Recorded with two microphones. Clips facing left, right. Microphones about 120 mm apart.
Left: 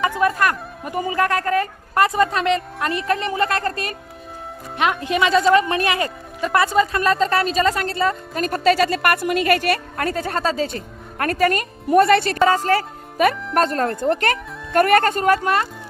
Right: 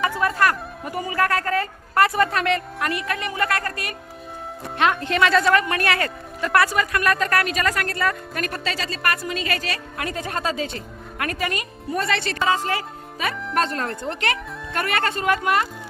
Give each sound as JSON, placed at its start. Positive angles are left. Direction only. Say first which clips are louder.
{"t": 0.0, "sound": "music", "louder": "left 3 dB", "side_deg": 20}
{"t": 0.3, "sound": "speech", "louder": "even", "side_deg": 20}
{"t": 4.8, "sound": "speech", "louder": "even", "side_deg": 15}
{"t": 8.6, "sound": "speech", "louder": "left 12 dB", "side_deg": 55}
{"t": 10.0, "sound": "a woman's voice", "louder": "left 5 dB", "side_deg": 35}